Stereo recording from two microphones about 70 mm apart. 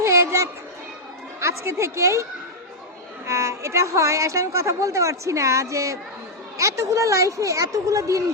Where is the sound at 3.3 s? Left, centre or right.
Right.